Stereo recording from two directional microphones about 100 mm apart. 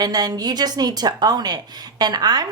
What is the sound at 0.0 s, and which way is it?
A woman's voice, 40° right (ahead or behind).